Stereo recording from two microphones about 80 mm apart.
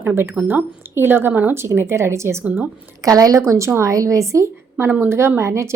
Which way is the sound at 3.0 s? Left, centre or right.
Right.